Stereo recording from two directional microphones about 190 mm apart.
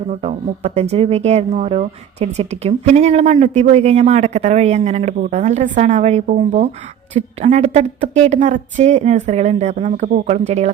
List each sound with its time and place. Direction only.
0.1 s speech: 35° right (ahead or behind)